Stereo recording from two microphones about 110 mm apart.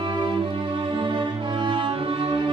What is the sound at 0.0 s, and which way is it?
Music, 45° right (ahead or behind).